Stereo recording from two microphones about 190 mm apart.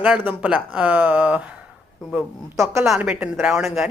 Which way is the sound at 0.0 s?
5° right (ahead or behind).